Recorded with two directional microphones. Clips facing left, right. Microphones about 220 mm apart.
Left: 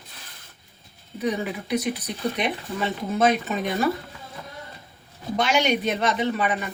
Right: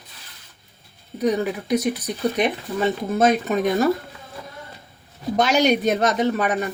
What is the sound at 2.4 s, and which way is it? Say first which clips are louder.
Speech: right 5 dB; 45° right (ahead or behind).